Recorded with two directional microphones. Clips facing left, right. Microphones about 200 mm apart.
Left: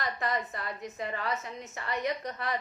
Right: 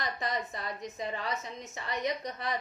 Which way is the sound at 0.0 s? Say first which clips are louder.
Left 2 dB; 15° right (ahead or behind).